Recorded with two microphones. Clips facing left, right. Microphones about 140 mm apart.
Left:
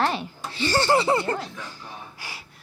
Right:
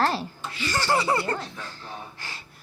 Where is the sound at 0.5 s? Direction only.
30° left (ahead or behind).